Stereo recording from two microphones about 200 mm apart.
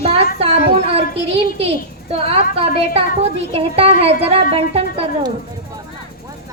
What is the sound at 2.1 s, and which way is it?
A woman's voice, 30° right (ahead or behind).